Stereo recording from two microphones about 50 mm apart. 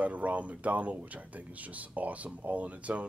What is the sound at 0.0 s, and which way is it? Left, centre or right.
Speech, right.